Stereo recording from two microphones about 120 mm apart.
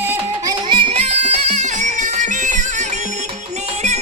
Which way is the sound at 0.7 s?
45° right (ahead or behind).